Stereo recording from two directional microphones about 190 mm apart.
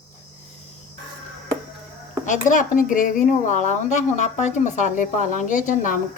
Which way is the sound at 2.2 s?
40° left (ahead or behind).